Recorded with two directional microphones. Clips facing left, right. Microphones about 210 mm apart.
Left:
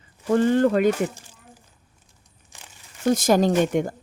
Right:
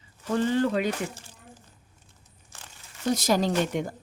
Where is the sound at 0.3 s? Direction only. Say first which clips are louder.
Left 6 dB; 50° left (ahead or behind).